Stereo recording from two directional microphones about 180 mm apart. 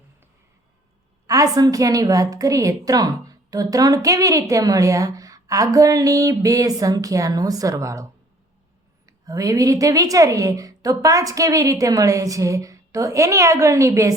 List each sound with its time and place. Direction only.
1.3 s a woman's voice: 20° right (ahead or behind)
9.0 s a woman's voice: 20° right (ahead or behind)